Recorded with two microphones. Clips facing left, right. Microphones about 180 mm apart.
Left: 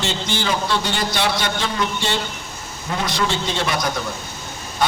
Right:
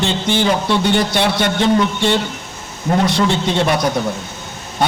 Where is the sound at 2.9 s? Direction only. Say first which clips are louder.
Right 9 dB; 45° right (ahead or behind).